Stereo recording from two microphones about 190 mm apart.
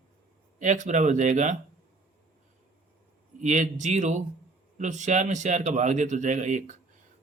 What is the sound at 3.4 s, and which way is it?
Speech, 40° right (ahead or behind).